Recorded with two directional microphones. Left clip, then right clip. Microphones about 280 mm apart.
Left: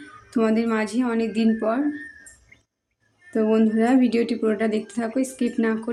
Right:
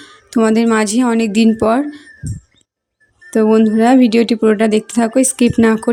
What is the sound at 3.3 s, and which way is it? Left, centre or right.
Speech, right.